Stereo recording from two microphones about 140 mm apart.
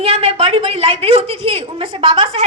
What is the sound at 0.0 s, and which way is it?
A woman's voice, 45° right (ahead or behind).